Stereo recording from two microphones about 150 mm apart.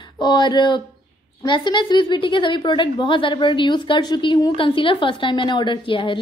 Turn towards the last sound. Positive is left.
turn(degrees=35)  # may be behind; listen again after turning